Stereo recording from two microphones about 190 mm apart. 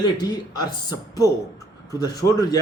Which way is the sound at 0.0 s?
20° left (ahead or behind).